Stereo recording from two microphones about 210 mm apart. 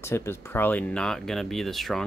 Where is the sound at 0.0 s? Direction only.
10° left (ahead or behind).